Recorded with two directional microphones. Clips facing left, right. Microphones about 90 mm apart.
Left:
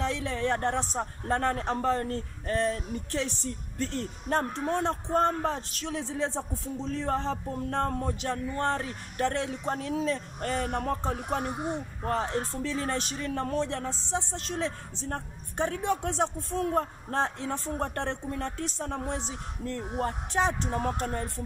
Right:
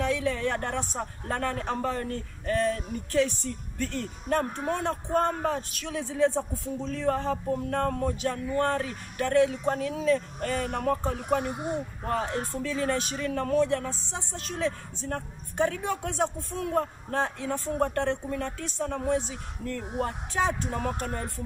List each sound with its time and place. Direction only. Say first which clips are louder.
0.0 s speech: right 3 dB; 30° left (ahead or behind)
17.1 s speech: even; 30° left (ahead or behind)